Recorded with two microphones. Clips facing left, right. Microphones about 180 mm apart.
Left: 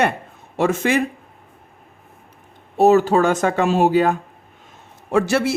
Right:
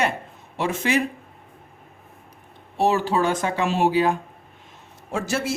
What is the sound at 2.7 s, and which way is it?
Speech, 45° left (ahead or behind).